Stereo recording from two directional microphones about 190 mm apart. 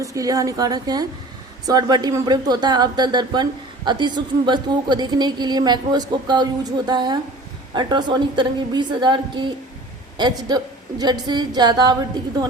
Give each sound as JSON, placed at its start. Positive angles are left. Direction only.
{"t": 0.0, "sound": "speech", "side_deg": -15}